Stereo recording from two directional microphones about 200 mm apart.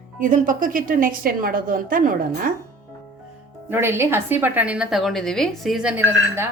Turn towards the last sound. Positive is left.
turn(degrees=-10)  # may be behind; listen again after turning